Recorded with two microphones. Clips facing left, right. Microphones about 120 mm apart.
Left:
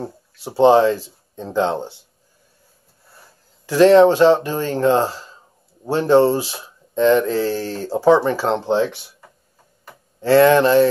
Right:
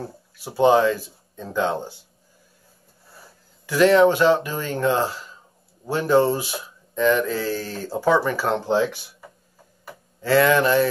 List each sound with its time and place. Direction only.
0.0 s speech: 30° left (ahead or behind)
3.6 s speech: 30° left (ahead or behind)
10.2 s speech: 30° left (ahead or behind)